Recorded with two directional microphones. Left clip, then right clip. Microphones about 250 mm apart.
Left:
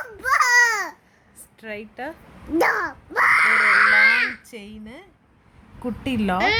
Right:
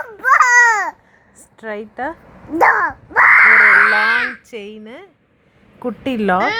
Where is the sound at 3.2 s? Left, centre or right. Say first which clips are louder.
Right 8 dB; left.